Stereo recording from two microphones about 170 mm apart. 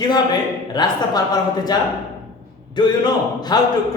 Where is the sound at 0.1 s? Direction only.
25° left (ahead or behind).